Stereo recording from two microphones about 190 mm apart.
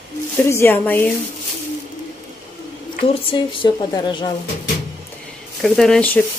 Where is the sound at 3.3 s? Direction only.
25° left (ahead or behind).